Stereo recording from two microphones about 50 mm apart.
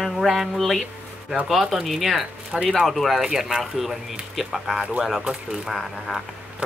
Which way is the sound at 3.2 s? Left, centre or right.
Centre.